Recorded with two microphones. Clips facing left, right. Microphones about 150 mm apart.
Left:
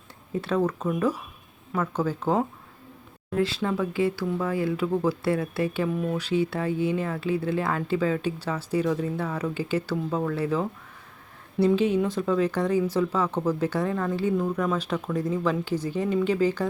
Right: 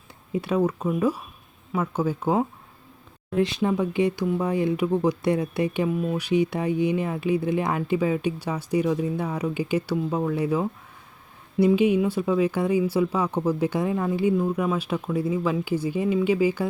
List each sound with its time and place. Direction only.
0.3 s speech: 10° right (ahead or behind)